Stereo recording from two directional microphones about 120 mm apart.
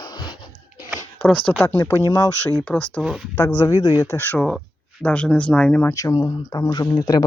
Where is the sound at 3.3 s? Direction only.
15° left (ahead or behind).